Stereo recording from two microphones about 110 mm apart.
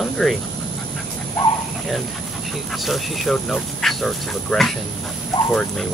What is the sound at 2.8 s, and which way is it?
Speech, centre (ahead or behind).